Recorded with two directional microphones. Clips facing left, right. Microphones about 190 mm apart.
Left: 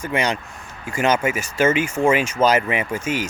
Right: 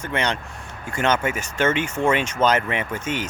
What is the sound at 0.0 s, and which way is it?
Speech, 10° left (ahead or behind).